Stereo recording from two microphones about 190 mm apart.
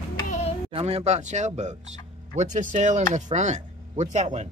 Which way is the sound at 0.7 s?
30° right (ahead or behind).